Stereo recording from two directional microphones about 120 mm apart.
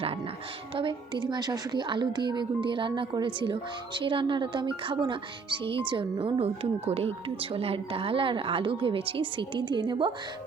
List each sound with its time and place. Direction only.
0.8 s a woman's voice: 40° right (ahead or behind)